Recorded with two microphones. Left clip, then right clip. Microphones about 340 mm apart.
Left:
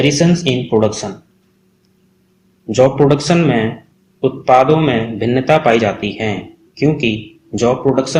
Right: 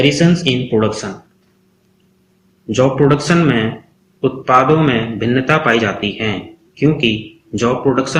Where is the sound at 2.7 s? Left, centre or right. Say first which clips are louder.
Left 2 dB; centre.